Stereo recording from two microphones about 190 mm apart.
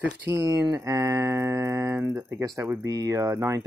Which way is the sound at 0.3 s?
15° right (ahead or behind).